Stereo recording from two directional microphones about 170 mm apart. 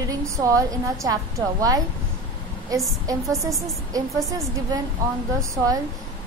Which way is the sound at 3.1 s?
20° right (ahead or behind).